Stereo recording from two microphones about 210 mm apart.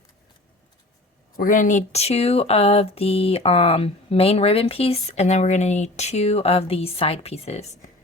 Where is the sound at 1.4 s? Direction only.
40° left (ahead or behind).